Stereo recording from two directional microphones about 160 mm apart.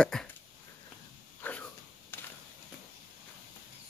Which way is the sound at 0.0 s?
5° left (ahead or behind).